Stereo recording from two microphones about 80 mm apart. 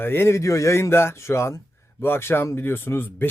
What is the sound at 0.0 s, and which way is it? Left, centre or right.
Speech, left.